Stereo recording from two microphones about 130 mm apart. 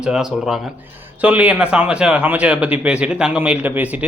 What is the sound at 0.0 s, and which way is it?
A man's voice, 5° right (ahead or behind).